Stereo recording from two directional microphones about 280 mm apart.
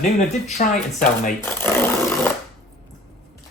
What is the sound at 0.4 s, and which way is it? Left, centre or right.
Speech, left.